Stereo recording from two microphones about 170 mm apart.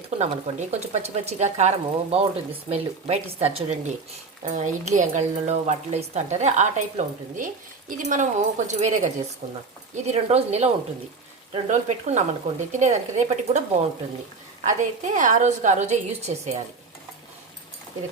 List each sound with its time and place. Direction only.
0.2 s speech: 40° right (ahead or behind)
11.7 s speech: 45° right (ahead or behind)
14.6 s speech: 45° right (ahead or behind)